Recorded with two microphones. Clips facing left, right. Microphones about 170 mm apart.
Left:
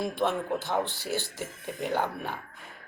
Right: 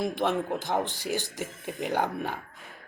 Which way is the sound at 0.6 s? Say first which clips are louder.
Right 1 dB; 15° right (ahead or behind).